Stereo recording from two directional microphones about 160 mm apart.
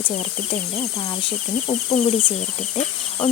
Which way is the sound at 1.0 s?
35° left (ahead or behind).